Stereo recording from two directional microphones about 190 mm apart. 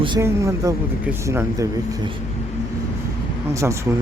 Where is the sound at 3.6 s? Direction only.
10° right (ahead or behind).